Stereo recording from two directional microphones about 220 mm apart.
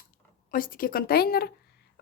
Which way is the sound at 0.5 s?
40° left (ahead or behind).